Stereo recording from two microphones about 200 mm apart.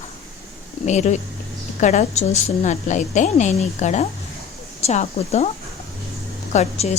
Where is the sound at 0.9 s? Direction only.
35° left (ahead or behind).